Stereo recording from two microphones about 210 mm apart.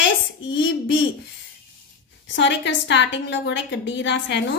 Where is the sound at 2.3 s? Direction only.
60° left (ahead or behind).